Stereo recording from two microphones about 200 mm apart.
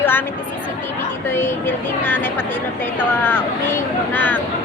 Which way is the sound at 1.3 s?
10° left (ahead or behind).